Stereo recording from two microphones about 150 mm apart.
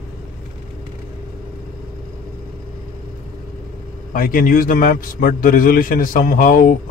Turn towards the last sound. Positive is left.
turn(degrees=70)  # may be behind; listen again after turning